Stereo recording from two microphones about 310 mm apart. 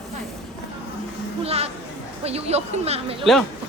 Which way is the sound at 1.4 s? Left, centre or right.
Centre.